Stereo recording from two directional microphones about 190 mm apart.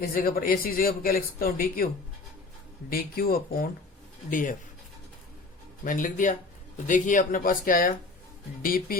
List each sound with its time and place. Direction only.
0.0 s speech: 50° left (ahead or behind)
2.9 s speech: 50° left (ahead or behind)
5.8 s speech: 45° left (ahead or behind)